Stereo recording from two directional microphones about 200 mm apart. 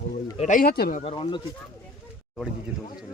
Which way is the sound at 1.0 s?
25° left (ahead or behind).